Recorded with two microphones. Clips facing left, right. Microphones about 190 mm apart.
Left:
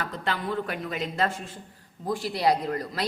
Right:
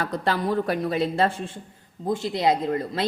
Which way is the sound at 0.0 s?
40° right (ahead or behind).